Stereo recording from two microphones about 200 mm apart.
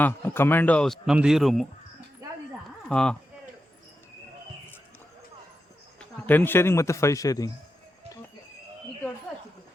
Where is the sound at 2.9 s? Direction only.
5° left (ahead or behind).